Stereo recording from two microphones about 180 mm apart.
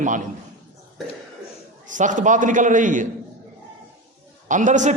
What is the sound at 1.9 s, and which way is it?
A man's voice, 45° right (ahead or behind).